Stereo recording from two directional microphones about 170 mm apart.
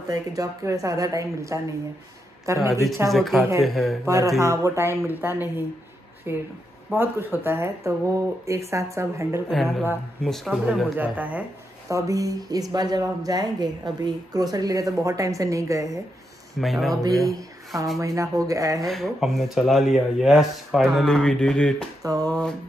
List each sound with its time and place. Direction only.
0.1 s a woman's voice: 20° right (ahead or behind)
3.1 s speech: centre (ahead or behind)
4.0 s speech: 15° right (ahead or behind)
9.5 s speech: centre (ahead or behind)
11.9 s a woman's voice: 20° right (ahead or behind)
16.5 s speech: centre (ahead or behind)
16.9 s a woman's voice: 20° right (ahead or behind)
18.9 s speech: centre (ahead or behind)
22.0 s a sound: 20° right (ahead or behind)